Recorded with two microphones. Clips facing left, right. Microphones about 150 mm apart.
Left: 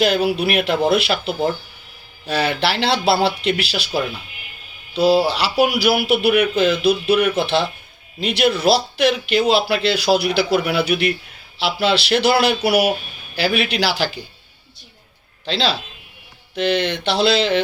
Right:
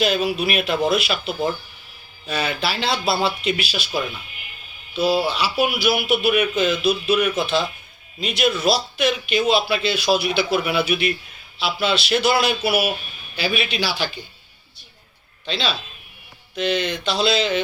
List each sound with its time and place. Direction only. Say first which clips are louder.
0.0 s speech: left 3 dB; 65° left (ahead or behind)
15.4 s speech: left 4 dB; 70° left (ahead or behind)